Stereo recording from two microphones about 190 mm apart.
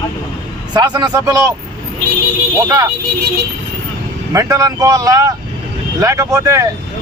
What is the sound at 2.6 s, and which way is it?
Speech, 20° right (ahead or behind).